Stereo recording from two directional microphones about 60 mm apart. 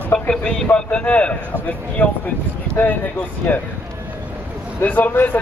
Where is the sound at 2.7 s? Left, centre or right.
Left.